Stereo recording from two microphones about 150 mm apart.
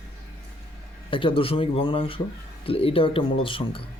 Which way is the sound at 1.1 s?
35° left (ahead or behind).